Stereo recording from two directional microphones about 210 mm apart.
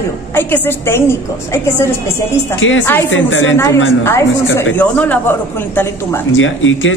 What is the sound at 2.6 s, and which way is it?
Speech, 65° left (ahead or behind).